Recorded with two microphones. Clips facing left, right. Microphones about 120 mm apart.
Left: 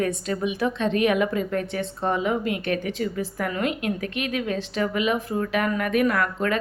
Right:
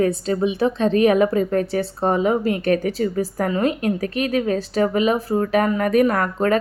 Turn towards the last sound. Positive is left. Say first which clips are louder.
# right 5 dB
turn(degrees=-35)  # may be behind; listen again after turning